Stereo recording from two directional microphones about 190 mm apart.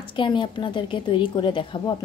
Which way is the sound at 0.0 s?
25° left (ahead or behind).